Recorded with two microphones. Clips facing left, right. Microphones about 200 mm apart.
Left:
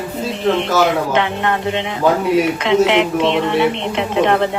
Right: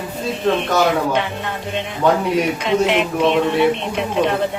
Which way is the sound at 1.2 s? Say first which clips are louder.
Left 5 dB; 65° left (ahead or behind).